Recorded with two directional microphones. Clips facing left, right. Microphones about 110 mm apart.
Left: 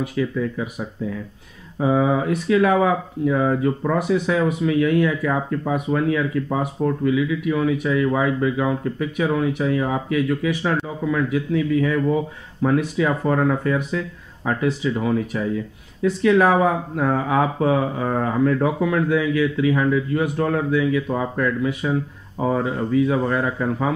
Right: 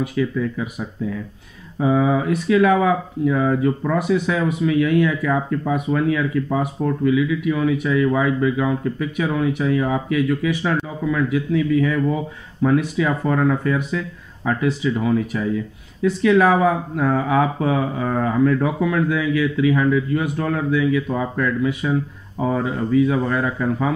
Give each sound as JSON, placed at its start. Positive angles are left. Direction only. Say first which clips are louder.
{"t": 0.0, "sound": "speech", "louder": "right 1 dB", "side_deg": 30}